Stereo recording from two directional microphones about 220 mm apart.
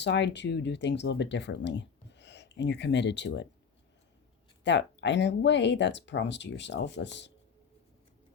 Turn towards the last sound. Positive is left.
turn(degrees=50)  # may be behind; listen again after turning